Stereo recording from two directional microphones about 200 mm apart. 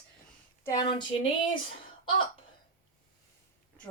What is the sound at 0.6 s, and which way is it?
Speech, 20° left (ahead or behind).